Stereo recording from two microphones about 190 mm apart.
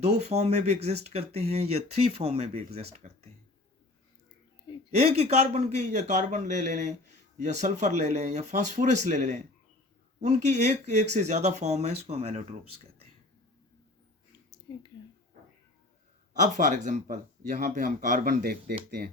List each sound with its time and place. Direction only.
0.0 s speech: 35° right (ahead or behind)
4.9 s speech: 35° right (ahead or behind)
16.3 s speech: 40° right (ahead or behind)